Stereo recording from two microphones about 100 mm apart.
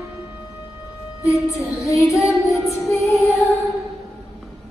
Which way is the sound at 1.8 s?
30° left (ahead or behind).